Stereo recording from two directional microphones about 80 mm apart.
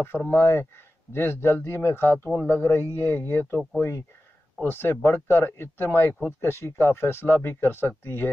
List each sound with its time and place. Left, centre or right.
0.0 s speech: left